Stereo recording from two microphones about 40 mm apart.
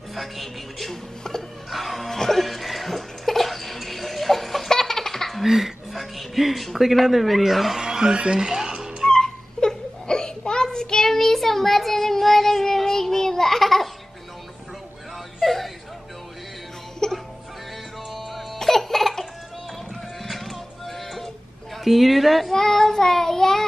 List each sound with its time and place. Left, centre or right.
0.1 s speech: centre
1.7 s music: centre
5.4 s music: centre
7.8 s music: centre
9.1 s a sound: centre
15.4 s whimper: centre
17.0 s music: centre
18.1 s music: centre
20.2 s music: centre
21.8 s a sound: centre
22.6 s child singing: centre